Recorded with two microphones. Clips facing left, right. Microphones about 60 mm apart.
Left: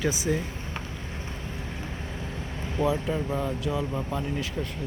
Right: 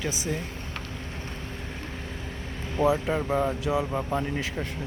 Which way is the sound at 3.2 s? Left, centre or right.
Right.